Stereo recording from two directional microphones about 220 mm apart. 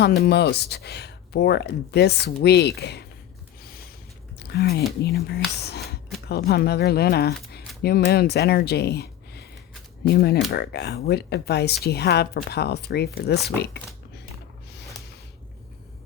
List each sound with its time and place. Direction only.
0.0 s speech: 45° left (ahead or behind)
4.4 s a sound: 50° left (ahead or behind)
5.0 s speech: 45° left (ahead or behind)